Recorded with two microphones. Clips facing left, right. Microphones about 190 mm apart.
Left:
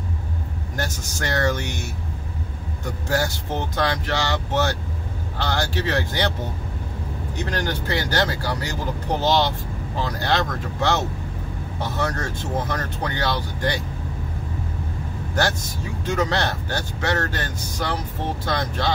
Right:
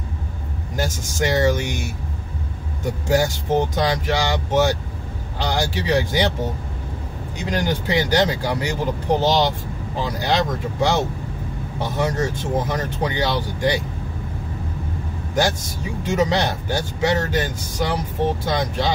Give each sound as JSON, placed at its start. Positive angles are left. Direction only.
{"t": 1.1, "sound": "speech", "side_deg": -15}
{"t": 3.1, "sound": "speech", "side_deg": -15}
{"t": 7.3, "sound": "speech", "side_deg": -15}
{"t": 16.0, "sound": "speech", "side_deg": -15}